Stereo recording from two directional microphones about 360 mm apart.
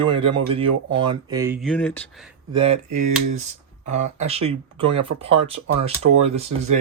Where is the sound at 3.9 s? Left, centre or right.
Centre.